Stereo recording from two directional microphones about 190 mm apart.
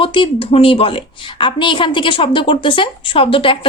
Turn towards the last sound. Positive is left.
turn(degrees=30)  # may be behind; listen again after turning